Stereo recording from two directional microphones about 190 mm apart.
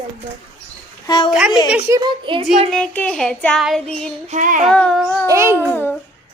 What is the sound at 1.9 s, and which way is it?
Speech, 25° right (ahead or behind).